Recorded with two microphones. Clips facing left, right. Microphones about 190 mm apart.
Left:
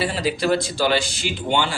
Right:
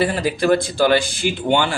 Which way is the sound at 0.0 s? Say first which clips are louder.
Right 4 dB; 55° right (ahead or behind).